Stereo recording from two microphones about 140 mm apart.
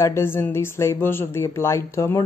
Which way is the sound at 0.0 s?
20° left (ahead or behind).